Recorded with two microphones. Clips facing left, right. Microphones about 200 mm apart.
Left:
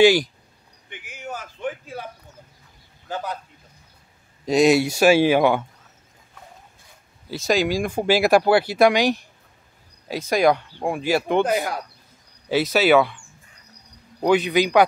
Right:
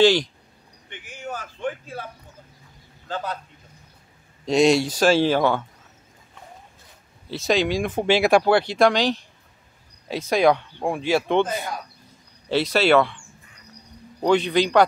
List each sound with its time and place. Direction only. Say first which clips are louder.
0.0 s speech: left 2 dB; 10° left (ahead or behind)
0.8 s a sound: right 1 dB; 10° left (ahead or behind)
4.5 s speech: left 1 dB; 5° left (ahead or behind)
7.2 s speech: left 1 dB; centre (ahead or behind)
11.4 s speech: left 6 dB; 70° left (ahead or behind)
12.4 s speech: left 1 dB; 5° left (ahead or behind)
14.2 s speech: left 1 dB; 5° left (ahead or behind)